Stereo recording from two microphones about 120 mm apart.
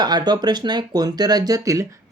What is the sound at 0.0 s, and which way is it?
Speech, 35° right (ahead or behind).